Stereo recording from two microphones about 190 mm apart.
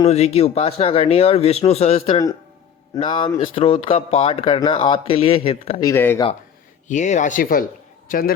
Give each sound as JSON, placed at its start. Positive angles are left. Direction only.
{"t": 0.1, "sound": "speech", "side_deg": 35}
{"t": 5.8, "sound": "speech", "side_deg": 10}
{"t": 6.8, "sound": "a man's voice", "side_deg": 40}